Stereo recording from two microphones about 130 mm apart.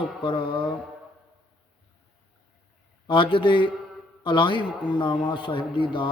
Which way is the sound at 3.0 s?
40° left (ahead or behind).